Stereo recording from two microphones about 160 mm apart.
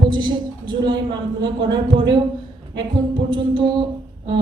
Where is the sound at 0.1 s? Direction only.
30° right (ahead or behind).